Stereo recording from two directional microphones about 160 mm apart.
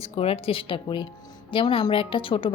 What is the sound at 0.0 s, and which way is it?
A woman's voice, 40° left (ahead or behind).